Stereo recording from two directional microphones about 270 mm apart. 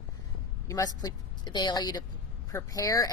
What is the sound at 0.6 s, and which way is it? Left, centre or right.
A woman's voice, centre.